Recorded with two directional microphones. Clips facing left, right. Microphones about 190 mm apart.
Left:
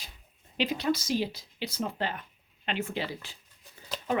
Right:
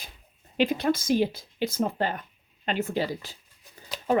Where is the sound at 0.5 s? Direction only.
50° right (ahead or behind).